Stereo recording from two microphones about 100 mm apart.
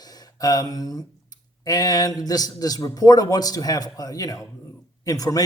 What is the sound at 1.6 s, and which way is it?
A man's voice, 40° left (ahead or behind).